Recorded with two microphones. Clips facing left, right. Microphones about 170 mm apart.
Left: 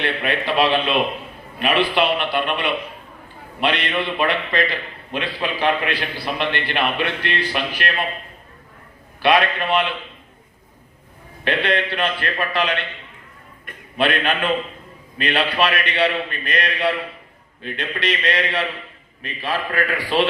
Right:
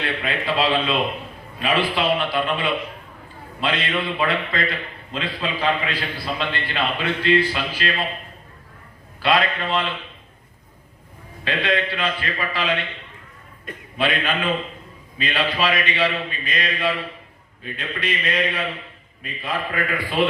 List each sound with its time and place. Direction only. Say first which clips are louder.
0.0 s a man's voice: left 3 dB; 70° left (ahead or behind)
5.1 s a man's voice: left 2 dB; 70° left (ahead or behind)
9.2 s a man's voice: left 3 dB; 70° left (ahead or behind)
11.4 s a man's voice: left 2 dB; 65° left (ahead or behind)
13.9 s a man's voice: left 3 dB; 65° left (ahead or behind); by 20.2 s 90° left